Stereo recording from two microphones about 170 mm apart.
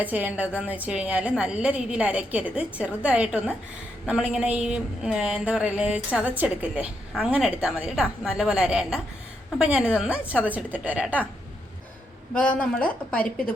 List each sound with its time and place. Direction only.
0.0 s a woman's voice: 10° right (ahead or behind)
12.3 s speech: 5° left (ahead or behind)